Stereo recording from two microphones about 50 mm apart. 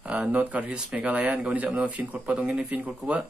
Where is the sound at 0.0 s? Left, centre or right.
Right.